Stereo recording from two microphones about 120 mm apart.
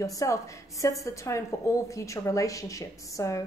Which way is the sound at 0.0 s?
25° left (ahead or behind).